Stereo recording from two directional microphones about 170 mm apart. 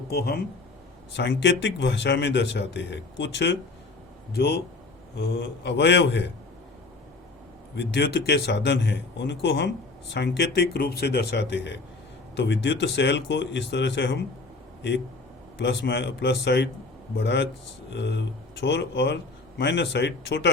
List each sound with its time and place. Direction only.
0.1 s speech: 70° left (ahead or behind)
1.1 s speech: 90° left
4.4 s speech: 70° left (ahead or behind); by 6.3 s 90° left
7.8 s speech: 90° left
15.5 s speech: 85° left